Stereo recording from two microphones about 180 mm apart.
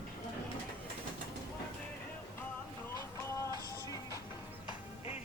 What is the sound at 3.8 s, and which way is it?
Music, 20° left (ahead or behind).